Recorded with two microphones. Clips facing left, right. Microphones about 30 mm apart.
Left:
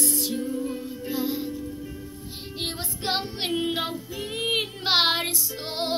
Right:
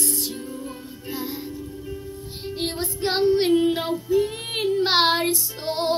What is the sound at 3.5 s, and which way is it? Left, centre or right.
Music, centre.